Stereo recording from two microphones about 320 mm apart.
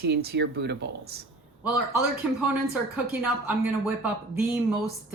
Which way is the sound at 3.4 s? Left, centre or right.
Centre.